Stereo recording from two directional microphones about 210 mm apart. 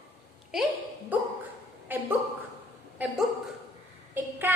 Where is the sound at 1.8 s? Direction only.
10° right (ahead or behind).